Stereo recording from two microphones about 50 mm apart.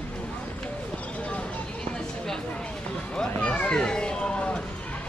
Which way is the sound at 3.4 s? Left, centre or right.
Left.